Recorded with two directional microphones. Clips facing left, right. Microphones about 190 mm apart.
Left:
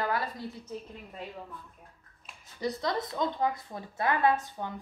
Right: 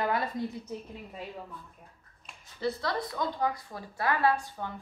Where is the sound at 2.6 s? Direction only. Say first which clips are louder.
Even; 20° left (ahead or behind).